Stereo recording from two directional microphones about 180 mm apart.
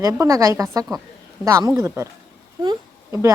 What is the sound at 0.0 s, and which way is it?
A woman's voice, 15° right (ahead or behind).